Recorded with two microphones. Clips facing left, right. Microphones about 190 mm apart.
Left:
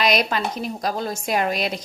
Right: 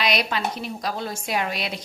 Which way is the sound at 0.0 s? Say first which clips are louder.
Left 3 dB; 45° left (ahead or behind).